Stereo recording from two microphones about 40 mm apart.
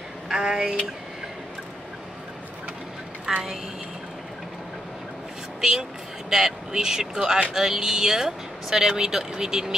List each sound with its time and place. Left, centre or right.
0.3 s speech: centre
3.3 s speech: centre
5.6 s speech: centre